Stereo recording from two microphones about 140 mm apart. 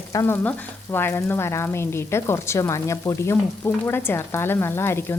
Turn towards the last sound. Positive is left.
turn(degrees=15)  # may be behind; listen again after turning